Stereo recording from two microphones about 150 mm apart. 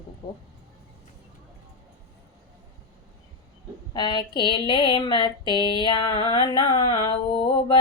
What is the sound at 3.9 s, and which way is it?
Speech, 30° left (ahead or behind).